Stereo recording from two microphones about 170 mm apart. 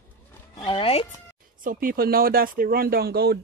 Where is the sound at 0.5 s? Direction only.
30° left (ahead or behind).